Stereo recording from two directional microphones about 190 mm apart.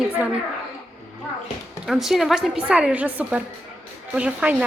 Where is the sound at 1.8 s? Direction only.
Centre (ahead or behind).